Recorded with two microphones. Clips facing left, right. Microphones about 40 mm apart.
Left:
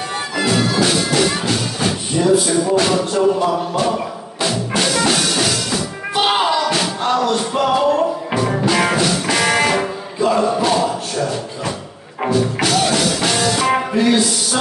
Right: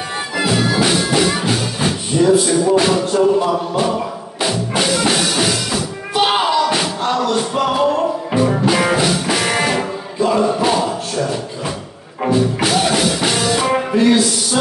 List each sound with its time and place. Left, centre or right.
0.4 s music: centre
2.3 s music: centre
4.4 s music: centre
6.1 s music: centre
8.9 s music: centre
9.5 s music: centre
10.6 s music: centre
12.3 s music: centre
13.7 s music: centre